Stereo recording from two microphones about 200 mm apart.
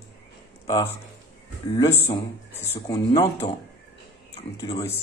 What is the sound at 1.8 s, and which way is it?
Speech, 10° left (ahead or behind).